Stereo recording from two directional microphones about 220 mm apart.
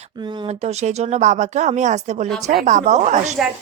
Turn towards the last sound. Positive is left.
turn(degrees=-30)  # may be behind; listen again after turning